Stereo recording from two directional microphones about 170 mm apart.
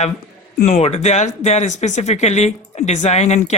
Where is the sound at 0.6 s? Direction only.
40° left (ahead or behind).